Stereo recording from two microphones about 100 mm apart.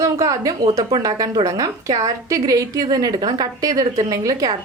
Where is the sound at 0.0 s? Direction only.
35° right (ahead or behind).